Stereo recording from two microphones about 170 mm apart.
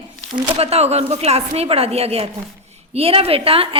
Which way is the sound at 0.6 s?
40° right (ahead or behind).